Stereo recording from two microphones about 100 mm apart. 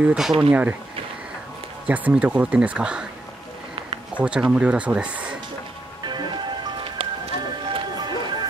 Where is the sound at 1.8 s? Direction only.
15° right (ahead or behind).